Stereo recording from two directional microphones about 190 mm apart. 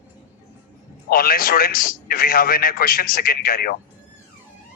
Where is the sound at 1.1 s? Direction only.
50° left (ahead or behind).